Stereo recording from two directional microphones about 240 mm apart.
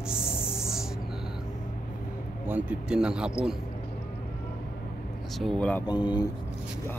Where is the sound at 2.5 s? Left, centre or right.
Centre.